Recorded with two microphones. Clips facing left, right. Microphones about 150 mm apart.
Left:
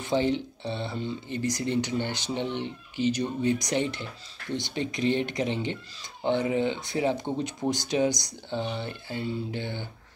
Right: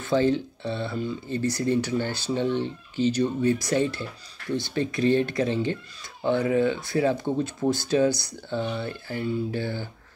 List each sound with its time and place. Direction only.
0.0 s speech: 20° left (ahead or behind)